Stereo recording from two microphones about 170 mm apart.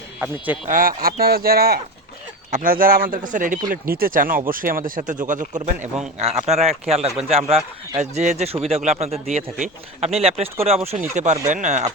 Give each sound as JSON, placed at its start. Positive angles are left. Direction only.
{"t": 0.7, "sound": "speech", "side_deg": -55}